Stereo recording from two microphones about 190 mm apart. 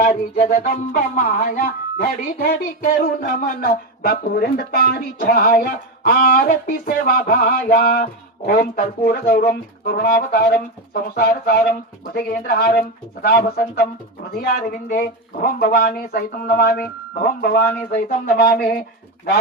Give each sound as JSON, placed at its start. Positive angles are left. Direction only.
{"t": 0.0, "sound": "music", "side_deg": 40}